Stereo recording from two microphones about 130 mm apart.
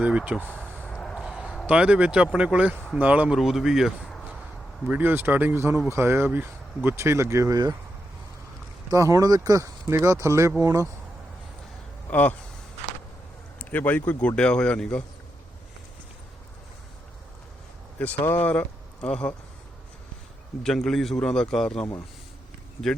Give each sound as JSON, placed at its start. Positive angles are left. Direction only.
{"t": 0.0, "sound": "speech", "side_deg": -10}
{"t": 0.5, "sound": "a sound", "side_deg": 10}
{"t": 1.2, "sound": "speech", "side_deg": -5}
{"t": 4.9, "sound": "speech", "side_deg": -15}
{"t": 8.9, "sound": "speech", "side_deg": -25}
{"t": 13.6, "sound": "speech", "side_deg": 15}
{"t": 18.3, "sound": "speech", "side_deg": 15}
{"t": 20.7, "sound": "a man's voice", "side_deg": 5}